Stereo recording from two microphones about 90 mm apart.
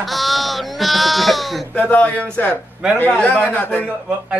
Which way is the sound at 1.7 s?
15° left (ahead or behind).